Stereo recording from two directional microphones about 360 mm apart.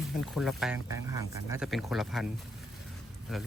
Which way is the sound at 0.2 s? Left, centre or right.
Centre.